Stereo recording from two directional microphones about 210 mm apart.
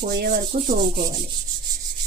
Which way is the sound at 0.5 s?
40° right (ahead or behind).